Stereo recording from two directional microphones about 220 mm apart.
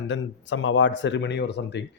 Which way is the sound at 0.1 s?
60° left (ahead or behind).